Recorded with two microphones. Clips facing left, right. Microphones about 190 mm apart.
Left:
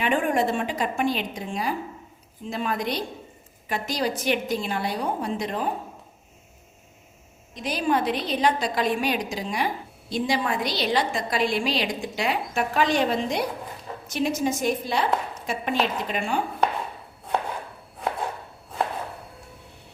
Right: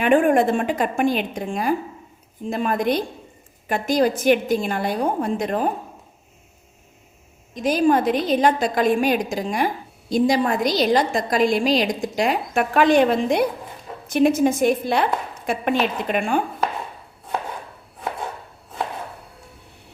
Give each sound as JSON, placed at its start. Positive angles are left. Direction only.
{"t": 0.0, "sound": "a woman's voice", "side_deg": -50}
{"t": 7.5, "sound": "a woman's voice", "side_deg": -45}